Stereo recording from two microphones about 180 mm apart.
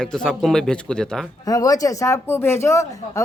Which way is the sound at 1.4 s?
20° left (ahead or behind).